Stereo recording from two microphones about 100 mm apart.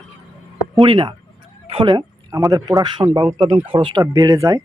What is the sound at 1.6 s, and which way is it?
Speech, 70° right (ahead or behind).